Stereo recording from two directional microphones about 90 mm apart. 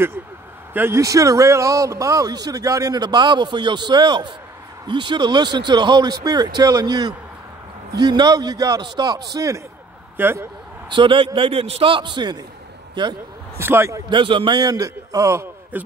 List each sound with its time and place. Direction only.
0.7 s speech: 25° right (ahead or behind)
1.0 s speech: 40° right (ahead or behind)
10.1 s speech: 25° right (ahead or behind)
10.9 s a man's voice: 65° right (ahead or behind)
13.6 s speech: 25° right (ahead or behind)
14.1 s a man's voice: 65° right (ahead or behind)
14.6 s a man's voice: 45° right (ahead or behind)
15.7 s speech: 20° right (ahead or behind)